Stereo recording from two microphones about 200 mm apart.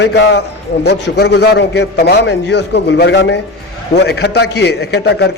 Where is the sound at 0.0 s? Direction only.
60° left (ahead or behind).